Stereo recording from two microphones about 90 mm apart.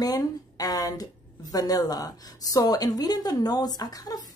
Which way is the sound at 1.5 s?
45° left (ahead or behind).